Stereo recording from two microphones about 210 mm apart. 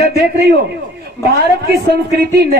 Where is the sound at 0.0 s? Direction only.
50° right (ahead or behind).